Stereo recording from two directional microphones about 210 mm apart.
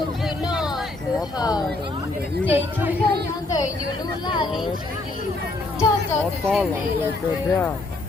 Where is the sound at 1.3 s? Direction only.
20° left (ahead or behind).